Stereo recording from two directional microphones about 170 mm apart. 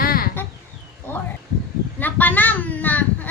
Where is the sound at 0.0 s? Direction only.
60° left (ahead or behind).